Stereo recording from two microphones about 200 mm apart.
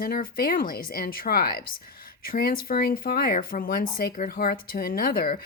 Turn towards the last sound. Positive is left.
turn(degrees=45)  # may be behind; listen again after turning